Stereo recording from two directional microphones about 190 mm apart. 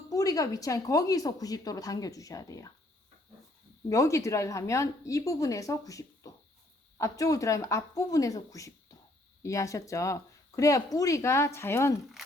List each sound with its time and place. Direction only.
0.1 s speech: 20° left (ahead or behind)
3.8 s speech: 15° left (ahead or behind)